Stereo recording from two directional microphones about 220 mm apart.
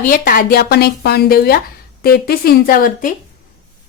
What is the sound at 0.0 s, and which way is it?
A woman's voice, 40° left (ahead or behind).